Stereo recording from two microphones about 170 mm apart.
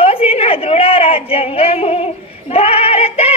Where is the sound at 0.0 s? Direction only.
35° left (ahead or behind).